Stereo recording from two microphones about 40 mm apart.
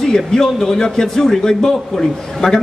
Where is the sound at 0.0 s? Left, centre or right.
Centre.